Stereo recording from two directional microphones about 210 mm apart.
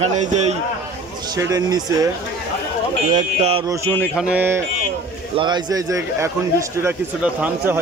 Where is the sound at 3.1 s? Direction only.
30° right (ahead or behind).